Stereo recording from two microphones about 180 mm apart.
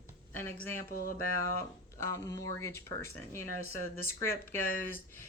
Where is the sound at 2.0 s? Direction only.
15° left (ahead or behind).